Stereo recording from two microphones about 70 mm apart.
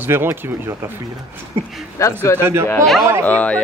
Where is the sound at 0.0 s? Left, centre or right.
Right.